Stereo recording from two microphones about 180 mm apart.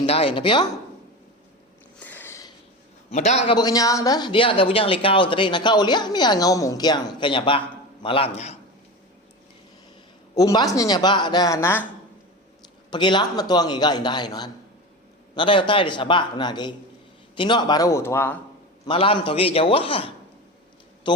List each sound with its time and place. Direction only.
0.0 s speech: 30° left (ahead or behind)
2.0 s a sound: 10° left (ahead or behind)
3.1 s a man's voice: 40° left (ahead or behind)
3.5 s a man's voice: 20° left (ahead or behind)
10.3 s speech: 20° left (ahead or behind)
12.9 s speech: 25° left (ahead or behind)
18.9 s a man's voice: 30° left (ahead or behind)